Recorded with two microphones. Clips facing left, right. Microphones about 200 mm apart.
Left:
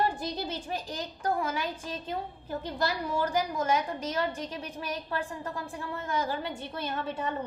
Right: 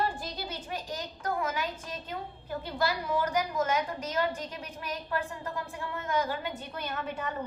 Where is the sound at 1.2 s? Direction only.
30° left (ahead or behind).